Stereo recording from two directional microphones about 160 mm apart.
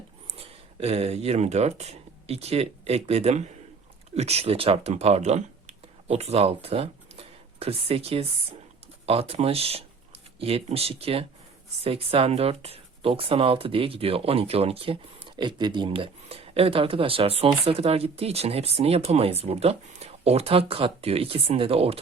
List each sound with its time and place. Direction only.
0.3 s speech: 40° right (ahead or behind)